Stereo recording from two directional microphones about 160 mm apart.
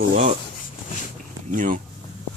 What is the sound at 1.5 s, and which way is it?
Speech, 55° right (ahead or behind).